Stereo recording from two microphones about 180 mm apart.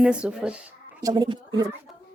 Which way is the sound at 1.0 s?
20° right (ahead or behind).